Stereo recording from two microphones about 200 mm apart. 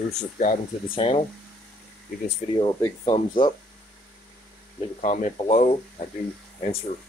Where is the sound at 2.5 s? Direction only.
20° left (ahead or behind).